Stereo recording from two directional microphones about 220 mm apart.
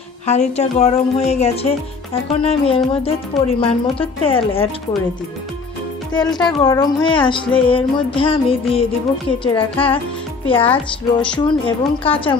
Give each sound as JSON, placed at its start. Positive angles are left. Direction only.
{"t": 0.3, "sound": "a woman's voice", "side_deg": 30}
{"t": 6.2, "sound": "speech", "side_deg": 0}
{"t": 6.6, "sound": "a woman's voice", "side_deg": 20}